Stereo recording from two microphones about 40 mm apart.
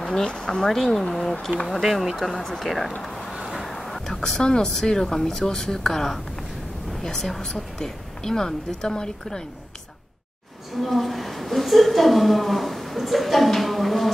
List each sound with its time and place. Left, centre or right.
0.0 s a sound: centre
0.3 s speech: centre
0.7 s a woman's voice: centre
1.8 s speech: centre
2.1 s speech: centre
3.0 s a sound: centre
3.7 s a sound: centre
4.4 s a woman's voice: centre
10.8 s a woman's voice: centre